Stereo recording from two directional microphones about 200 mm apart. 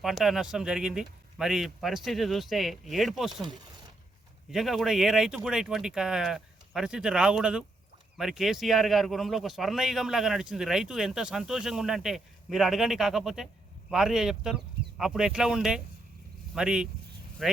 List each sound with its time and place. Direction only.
0.0 s a man's voice: centre (ahead or behind)
4.5 s a man's voice: centre (ahead or behind)